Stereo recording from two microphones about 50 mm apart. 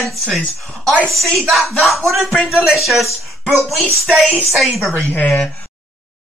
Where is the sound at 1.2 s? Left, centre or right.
Centre.